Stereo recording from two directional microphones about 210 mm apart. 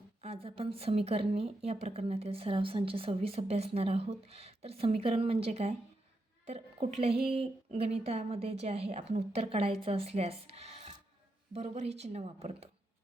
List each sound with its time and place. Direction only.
0.2 s a woman's voice: 30° right (ahead or behind)